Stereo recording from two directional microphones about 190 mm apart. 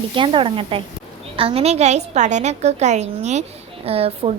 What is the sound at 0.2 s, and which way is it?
A woman's voice, 25° right (ahead or behind).